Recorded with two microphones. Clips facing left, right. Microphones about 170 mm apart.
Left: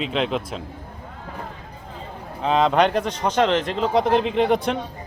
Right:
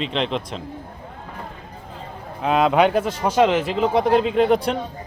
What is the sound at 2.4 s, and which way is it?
Speech, 5° right (ahead or behind).